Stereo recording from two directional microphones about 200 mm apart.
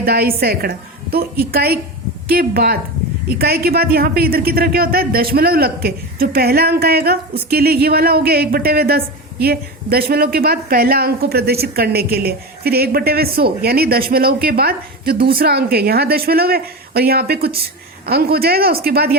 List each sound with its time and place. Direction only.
0.0 s speech: 50° right (ahead or behind)